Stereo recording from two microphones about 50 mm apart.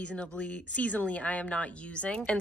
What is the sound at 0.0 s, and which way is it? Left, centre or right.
Speech, left.